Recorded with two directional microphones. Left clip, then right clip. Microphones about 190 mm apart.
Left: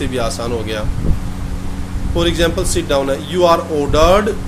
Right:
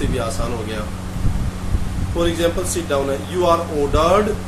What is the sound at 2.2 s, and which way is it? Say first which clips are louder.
Speech: left 3 dB; 45° left (ahead or behind).